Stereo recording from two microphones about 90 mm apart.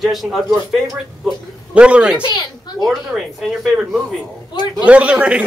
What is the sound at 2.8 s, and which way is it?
Speech, centre (ahead or behind).